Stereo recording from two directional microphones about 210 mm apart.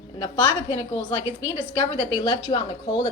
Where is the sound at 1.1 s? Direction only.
10° right (ahead or behind).